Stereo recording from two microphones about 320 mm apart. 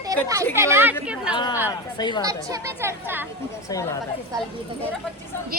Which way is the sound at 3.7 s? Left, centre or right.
Centre.